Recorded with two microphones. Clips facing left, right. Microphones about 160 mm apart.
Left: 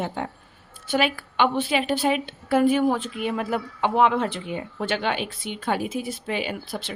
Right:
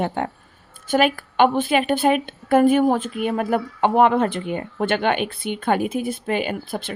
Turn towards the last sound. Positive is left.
turn(degrees=-50)  # may be behind; listen again after turning